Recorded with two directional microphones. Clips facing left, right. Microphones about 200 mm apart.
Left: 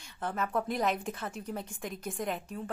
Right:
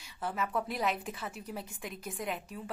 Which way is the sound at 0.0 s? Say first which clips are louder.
Left 1 dB; 5° right (ahead or behind).